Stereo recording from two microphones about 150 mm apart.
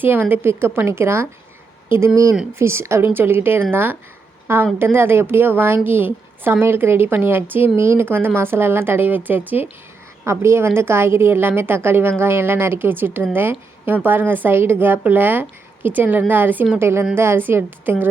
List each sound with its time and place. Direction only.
0.0 s a woman's voice: 15° right (ahead or behind)